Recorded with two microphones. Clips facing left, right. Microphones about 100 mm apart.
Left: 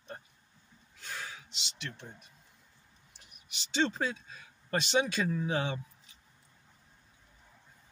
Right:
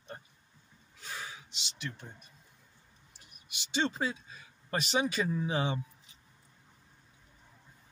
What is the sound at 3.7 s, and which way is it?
Speech, 5° right (ahead or behind).